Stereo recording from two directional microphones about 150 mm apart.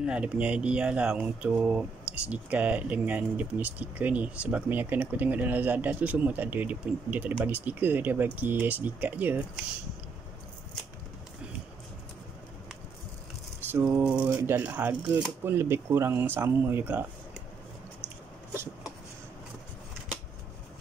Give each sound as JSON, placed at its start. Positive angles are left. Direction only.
{"t": 0.0, "sound": "speech", "side_deg": -5}
{"t": 13.7, "sound": "a sound", "side_deg": -20}
{"t": 14.0, "sound": "speech", "side_deg": -10}